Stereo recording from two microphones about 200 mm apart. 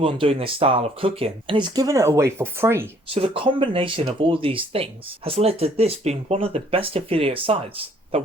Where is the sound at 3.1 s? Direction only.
30° right (ahead or behind).